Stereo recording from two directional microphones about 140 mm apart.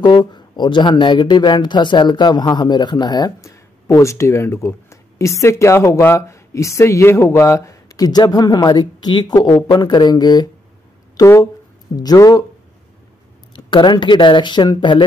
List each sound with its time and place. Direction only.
0.0 s speech: 30° left (ahead or behind)
13.7 s speech: 35° left (ahead or behind)